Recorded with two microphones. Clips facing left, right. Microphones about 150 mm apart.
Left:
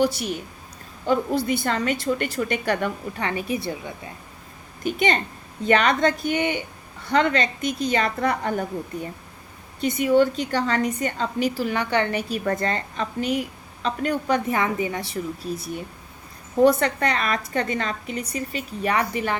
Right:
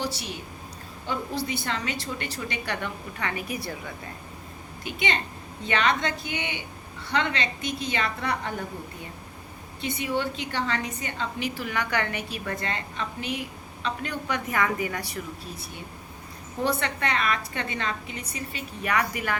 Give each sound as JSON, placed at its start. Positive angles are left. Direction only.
{"t": 0.0, "sound": "a woman's voice", "side_deg": 50}
{"t": 3.2, "sound": "a woman's voice", "side_deg": 30}
{"t": 4.8, "sound": "a woman's voice", "side_deg": 45}
{"t": 9.8, "sound": "a woman's voice", "side_deg": 45}
{"t": 12.3, "sound": "a woman's voice", "side_deg": 40}
{"t": 16.6, "sound": "a woman's voice", "side_deg": 40}